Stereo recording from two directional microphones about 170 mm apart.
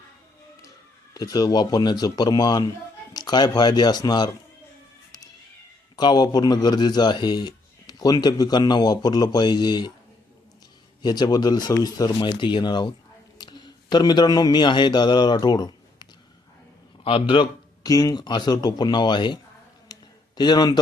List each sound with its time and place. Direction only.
1.1 s speech: 20° left (ahead or behind)
6.0 s speech: 25° left (ahead or behind)
11.0 s a man's voice: 25° left (ahead or behind)
17.8 s speech: 20° left (ahead or behind)
19.9 s a sound: 25° left (ahead or behind)